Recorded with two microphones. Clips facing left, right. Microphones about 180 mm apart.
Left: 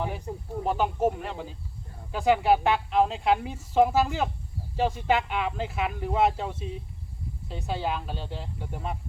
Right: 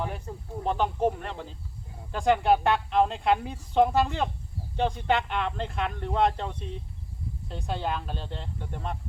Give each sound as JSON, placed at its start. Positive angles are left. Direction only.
{"t": 0.3, "sound": "speech", "side_deg": 15}
{"t": 0.6, "sound": "a woman's voice", "side_deg": 5}